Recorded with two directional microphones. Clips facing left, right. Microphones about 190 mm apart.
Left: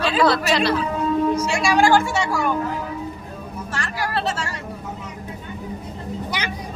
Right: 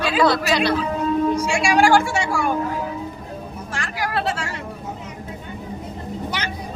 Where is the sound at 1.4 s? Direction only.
10° right (ahead or behind).